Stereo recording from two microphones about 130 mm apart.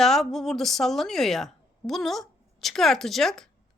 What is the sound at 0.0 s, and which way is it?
A woman's voice, centre (ahead or behind).